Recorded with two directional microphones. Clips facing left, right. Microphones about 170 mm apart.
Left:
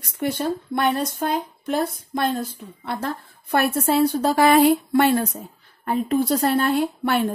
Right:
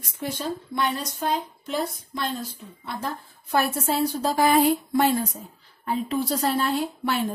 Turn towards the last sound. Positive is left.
turn(degrees=55)  # may be behind; listen again after turning